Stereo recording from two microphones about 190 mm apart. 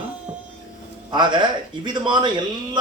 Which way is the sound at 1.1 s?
25° right (ahead or behind).